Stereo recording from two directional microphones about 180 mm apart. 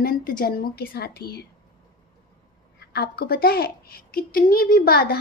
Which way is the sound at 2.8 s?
60° left (ahead or behind).